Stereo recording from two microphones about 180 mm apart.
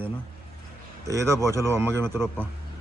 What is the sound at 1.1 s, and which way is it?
Speech, 15° right (ahead or behind).